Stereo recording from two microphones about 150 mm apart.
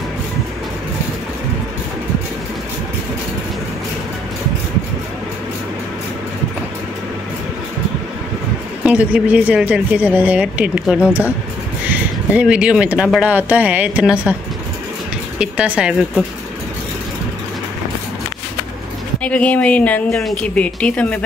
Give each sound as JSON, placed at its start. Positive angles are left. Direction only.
{"t": 8.8, "sound": "speech", "side_deg": -10}
{"t": 15.3, "sound": "speech", "side_deg": -5}
{"t": 19.2, "sound": "a woman's voice", "side_deg": 10}